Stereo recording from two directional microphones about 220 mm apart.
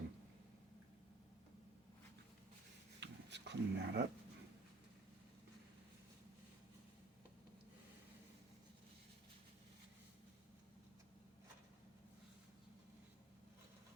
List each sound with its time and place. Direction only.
3.0 s dog: 50° right (ahead or behind)